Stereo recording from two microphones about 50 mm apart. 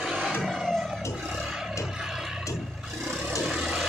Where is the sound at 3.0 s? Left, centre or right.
Centre.